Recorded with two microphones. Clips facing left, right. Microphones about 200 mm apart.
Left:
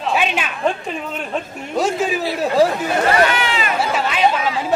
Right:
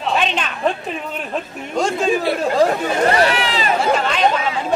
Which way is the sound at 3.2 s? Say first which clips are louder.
Even; 35° right (ahead or behind).